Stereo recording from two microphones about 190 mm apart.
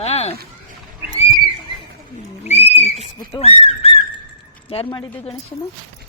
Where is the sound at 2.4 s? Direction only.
35° left (ahead or behind).